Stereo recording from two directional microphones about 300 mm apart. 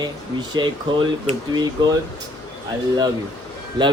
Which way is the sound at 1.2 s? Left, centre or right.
Centre.